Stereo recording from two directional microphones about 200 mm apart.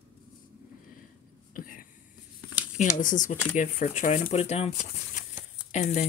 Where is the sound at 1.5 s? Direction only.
45° left (ahead or behind).